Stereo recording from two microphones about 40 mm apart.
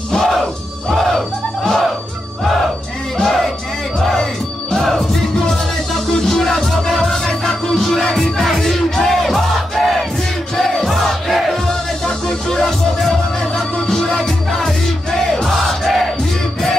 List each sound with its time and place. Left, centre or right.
0.2 s crowd: centre
3.2 s a sound: centre
4.0 s music: centre
6.2 s music: centre
10.9 s crowd: centre
12.3 s music: centre
13.8 s music: centre
15.4 s crowd: centre